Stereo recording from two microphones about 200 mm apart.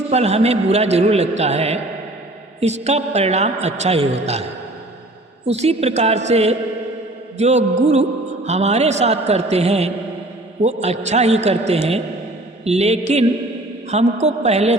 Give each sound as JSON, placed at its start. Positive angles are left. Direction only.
{"t": 0.1, "sound": "a man's voice", "side_deg": -30}
{"t": 5.5, "sound": "a man's voice", "side_deg": -30}